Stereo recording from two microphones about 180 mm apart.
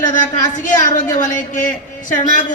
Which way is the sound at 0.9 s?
45° left (ahead or behind).